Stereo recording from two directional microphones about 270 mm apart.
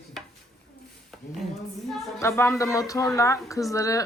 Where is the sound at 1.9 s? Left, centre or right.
Centre.